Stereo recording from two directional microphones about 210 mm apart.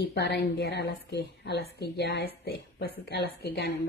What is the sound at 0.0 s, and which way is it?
Speech, 55° left (ahead or behind).